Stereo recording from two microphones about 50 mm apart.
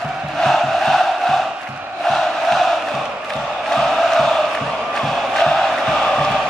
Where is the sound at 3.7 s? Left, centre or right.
Centre.